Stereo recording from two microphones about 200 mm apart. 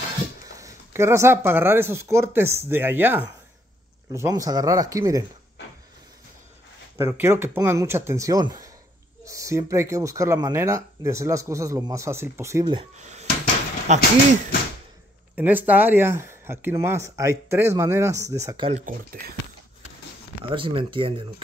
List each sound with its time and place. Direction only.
0.6 s speech: 15° right (ahead or behind)
7.0 s speech: 10° right (ahead or behind)
12.9 s speech: 35° right (ahead or behind)
15.3 s speech: 10° right (ahead or behind)
18.7 s speech: 45° right (ahead or behind)
20.4 s speech: 25° right (ahead or behind)